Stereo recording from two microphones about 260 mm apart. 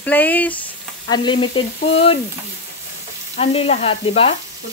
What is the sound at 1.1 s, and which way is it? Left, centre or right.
Speech, centre.